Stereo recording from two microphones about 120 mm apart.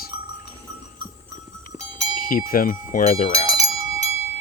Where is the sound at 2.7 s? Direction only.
90° left.